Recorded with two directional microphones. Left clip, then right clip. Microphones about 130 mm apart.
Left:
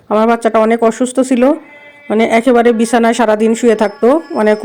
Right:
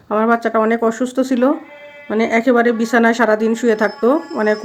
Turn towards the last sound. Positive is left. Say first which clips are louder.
# left 5 dB
turn(degrees=40)  # may be behind; listen again after turning